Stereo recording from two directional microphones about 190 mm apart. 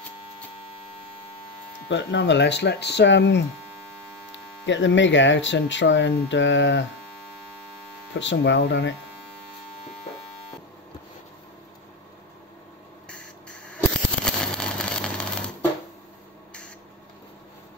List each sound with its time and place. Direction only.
1.9 s speech: 70° left (ahead or behind)
4.6 s speech: 75° left (ahead or behind)
8.1 s speech: 75° left (ahead or behind)
14.2 s a sound: 5° left (ahead or behind)